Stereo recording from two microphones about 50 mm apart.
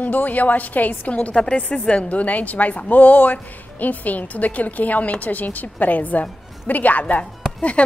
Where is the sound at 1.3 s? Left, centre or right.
Centre.